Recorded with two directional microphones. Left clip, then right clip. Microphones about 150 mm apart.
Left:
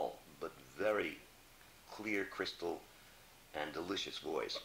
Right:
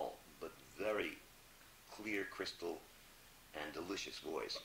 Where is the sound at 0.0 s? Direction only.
45° right (ahead or behind).